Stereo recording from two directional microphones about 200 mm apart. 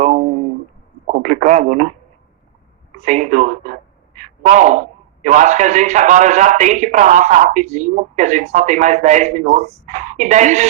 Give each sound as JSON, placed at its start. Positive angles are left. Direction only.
{"t": 1.2, "sound": "radio", "side_deg": -35}
{"t": 3.0, "sound": "a man's voice", "side_deg": -35}